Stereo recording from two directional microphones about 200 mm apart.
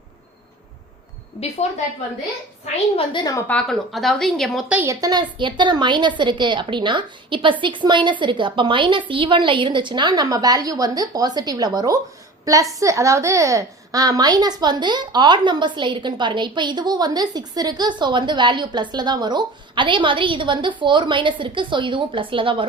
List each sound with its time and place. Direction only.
2.7 s a woman's voice: 25° left (ahead or behind)
3.4 s a woman's voice: 5° left (ahead or behind); by 22.6 s 25° right (ahead or behind)